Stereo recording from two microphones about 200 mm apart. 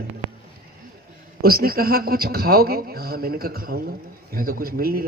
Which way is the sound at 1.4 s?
50° right (ahead or behind).